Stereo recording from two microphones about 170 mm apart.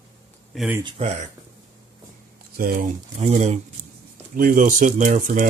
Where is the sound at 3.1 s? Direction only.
40° right (ahead or behind).